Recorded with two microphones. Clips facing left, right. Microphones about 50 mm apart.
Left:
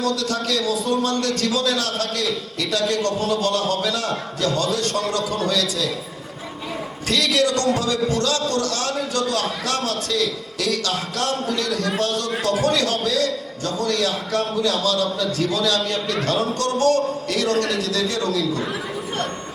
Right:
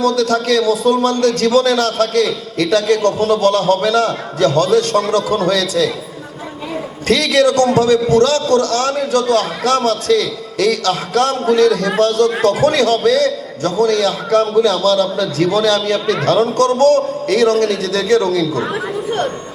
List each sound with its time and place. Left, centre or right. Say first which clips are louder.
0.0 s a man's voice: right 8 dB; right
7.1 s a man's voice: right 7 dB; right
8.1 s a man's voice: right 10 dB; right
11.3 s a man's voice: right 12 dB; right